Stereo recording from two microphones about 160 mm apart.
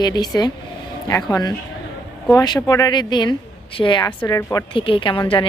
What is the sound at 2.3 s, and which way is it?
Speech, 25° left (ahead or behind).